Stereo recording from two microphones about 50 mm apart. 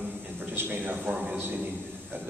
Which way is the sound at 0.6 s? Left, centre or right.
Right.